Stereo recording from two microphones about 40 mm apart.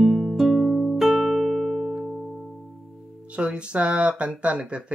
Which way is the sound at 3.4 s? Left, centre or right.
Right.